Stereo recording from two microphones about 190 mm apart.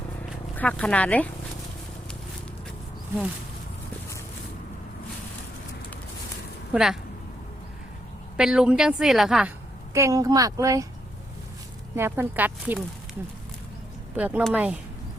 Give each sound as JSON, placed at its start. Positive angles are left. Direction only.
{"t": 0.5, "sound": "speech", "side_deg": 10}
{"t": 6.7, "sound": "a woman's voice", "side_deg": 0}
{"t": 8.4, "sound": "a woman's voice", "side_deg": -5}
{"t": 9.9, "sound": "a woman's voice", "side_deg": -15}
{"t": 11.9, "sound": "a woman's voice", "side_deg": -10}
{"t": 14.2, "sound": "a woman's voice", "side_deg": -5}